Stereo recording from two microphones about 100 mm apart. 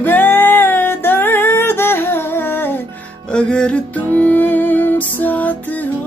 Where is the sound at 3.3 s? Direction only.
10° left (ahead or behind).